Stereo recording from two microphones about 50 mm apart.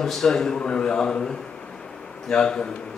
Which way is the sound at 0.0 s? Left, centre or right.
Centre.